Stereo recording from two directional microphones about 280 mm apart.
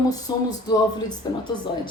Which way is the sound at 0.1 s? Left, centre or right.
Centre.